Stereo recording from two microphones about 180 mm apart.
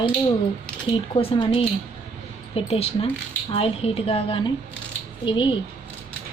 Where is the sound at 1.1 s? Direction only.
30° left (ahead or behind).